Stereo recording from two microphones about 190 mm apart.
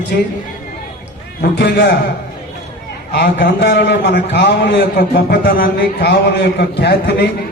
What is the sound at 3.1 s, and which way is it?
A man's voice, 65° left (ahead or behind).